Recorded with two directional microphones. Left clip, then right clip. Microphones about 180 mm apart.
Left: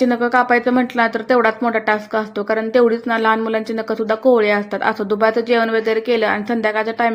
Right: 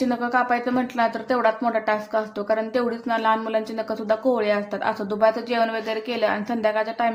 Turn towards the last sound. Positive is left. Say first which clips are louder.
# left 4 dB
turn(degrees=25)  # may be behind; listen again after turning